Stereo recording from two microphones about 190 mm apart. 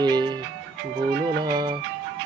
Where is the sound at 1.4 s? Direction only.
20° right (ahead or behind).